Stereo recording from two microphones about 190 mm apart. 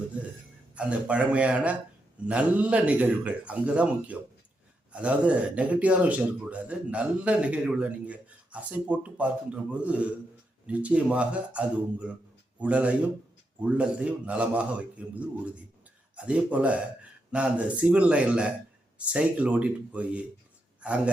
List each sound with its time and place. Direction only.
0.8 s speech: 5° right (ahead or behind)